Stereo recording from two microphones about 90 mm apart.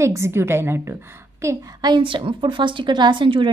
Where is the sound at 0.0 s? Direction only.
30° right (ahead or behind).